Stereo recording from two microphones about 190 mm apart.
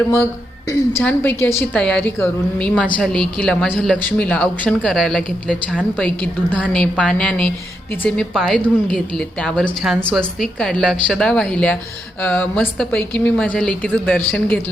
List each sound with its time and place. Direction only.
0.7 s a woman's voice: 10° left (ahead or behind)